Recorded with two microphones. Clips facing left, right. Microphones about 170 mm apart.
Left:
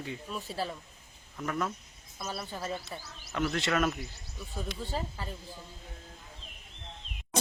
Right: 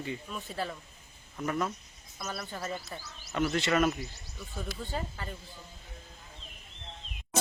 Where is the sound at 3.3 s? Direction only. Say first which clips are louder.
Right 2 dB; centre (ahead or behind).